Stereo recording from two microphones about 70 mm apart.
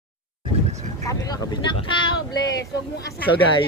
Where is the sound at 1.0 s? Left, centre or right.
Left.